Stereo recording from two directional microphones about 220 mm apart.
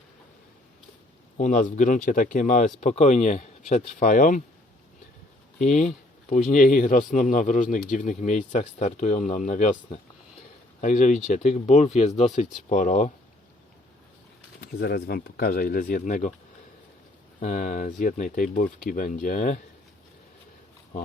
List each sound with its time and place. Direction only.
1.4 s speech: 35° left (ahead or behind)
5.5 s speech: 35° left (ahead or behind)
14.6 s speech: 45° left (ahead or behind)
17.4 s speech: 35° left (ahead or behind)